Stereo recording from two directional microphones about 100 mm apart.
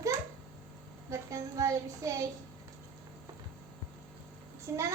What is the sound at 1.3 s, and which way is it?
A child's voice, 35° right (ahead or behind).